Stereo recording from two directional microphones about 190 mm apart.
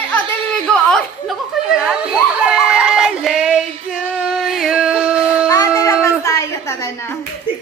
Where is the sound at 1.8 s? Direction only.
5° right (ahead or behind).